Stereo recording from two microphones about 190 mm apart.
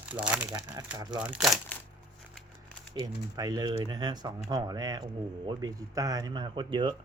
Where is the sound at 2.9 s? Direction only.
20° right (ahead or behind).